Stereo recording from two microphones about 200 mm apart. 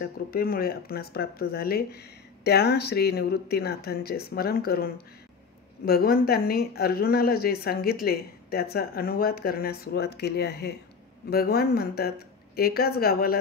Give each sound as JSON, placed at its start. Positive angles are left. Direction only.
{"t": 0.0, "sound": "speech", "side_deg": 50}